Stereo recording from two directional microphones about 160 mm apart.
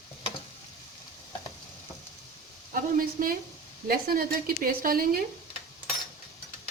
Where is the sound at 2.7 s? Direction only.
60° right (ahead or behind).